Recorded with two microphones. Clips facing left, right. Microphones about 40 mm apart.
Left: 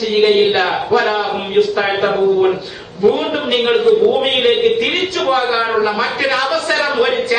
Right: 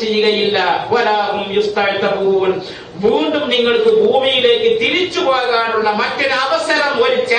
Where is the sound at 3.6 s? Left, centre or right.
Centre.